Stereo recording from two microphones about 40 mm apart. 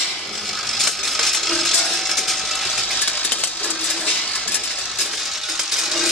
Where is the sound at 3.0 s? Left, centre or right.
Left.